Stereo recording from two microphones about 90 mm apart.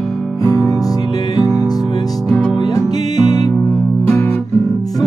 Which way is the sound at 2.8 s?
45° left (ahead or behind).